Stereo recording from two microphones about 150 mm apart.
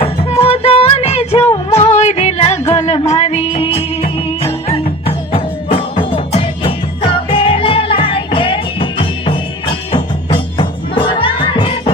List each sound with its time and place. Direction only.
0.0 s music: 40° left (ahead or behind)